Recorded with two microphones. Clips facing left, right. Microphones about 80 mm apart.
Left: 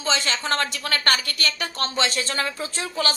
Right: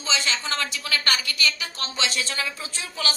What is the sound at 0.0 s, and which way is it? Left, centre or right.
A woman's voice, left.